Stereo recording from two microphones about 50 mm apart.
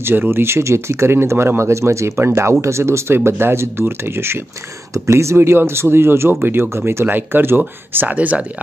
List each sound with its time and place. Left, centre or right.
0.0 s speech: right
1.6 s speech: right
4.9 s speech: right